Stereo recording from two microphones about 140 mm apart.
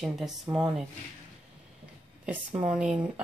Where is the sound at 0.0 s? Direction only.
Centre (ahead or behind).